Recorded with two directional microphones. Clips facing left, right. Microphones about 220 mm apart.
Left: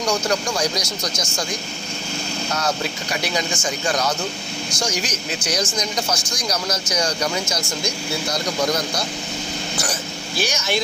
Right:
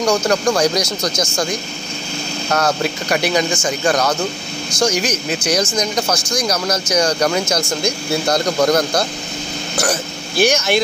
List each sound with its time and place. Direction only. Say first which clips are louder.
0.0 s speech: right 6 dB; 65° right (ahead or behind)
2.5 s speech: right 7 dB; 60° right (ahead or behind)
10.4 s speech: right 9 dB; 60° right (ahead or behind)